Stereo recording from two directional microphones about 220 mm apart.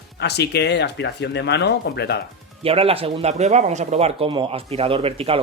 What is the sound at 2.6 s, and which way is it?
Speech, 25° right (ahead or behind).